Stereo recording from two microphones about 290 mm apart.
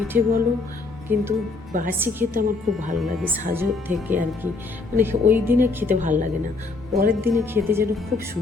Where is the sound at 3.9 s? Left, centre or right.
Right.